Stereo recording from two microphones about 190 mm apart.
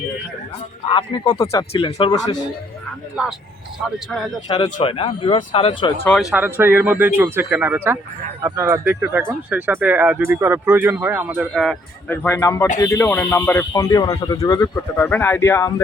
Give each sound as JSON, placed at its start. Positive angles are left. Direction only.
{"t": 0.9, "sound": "speech", "side_deg": 25}
{"t": 3.8, "sound": "speech", "side_deg": 0}
{"t": 4.4, "sound": "speech", "side_deg": 25}
{"t": 6.3, "sound": "speech", "side_deg": -10}